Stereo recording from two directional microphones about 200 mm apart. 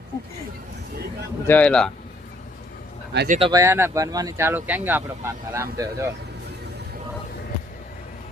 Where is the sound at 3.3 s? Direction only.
25° right (ahead or behind).